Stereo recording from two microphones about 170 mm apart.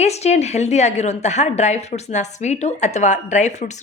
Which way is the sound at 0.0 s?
40° left (ahead or behind).